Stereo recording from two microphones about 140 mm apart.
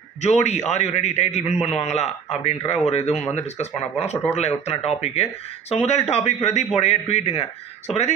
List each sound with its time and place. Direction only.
0.2 s speech: 55° left (ahead or behind)